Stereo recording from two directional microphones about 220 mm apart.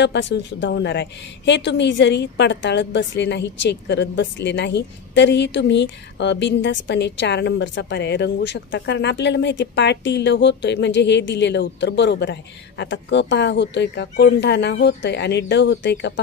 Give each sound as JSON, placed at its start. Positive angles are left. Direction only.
{"t": 0.0, "sound": "a woman's voice", "side_deg": 55}